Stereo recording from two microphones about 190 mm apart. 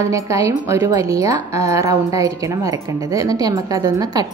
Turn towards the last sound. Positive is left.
turn(degrees=-20)  # may be behind; listen again after turning